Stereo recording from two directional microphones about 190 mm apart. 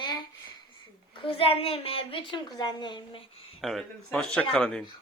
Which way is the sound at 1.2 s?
30° left (ahead or behind).